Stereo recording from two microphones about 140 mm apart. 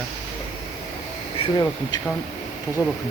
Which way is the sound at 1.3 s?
40° left (ahead or behind).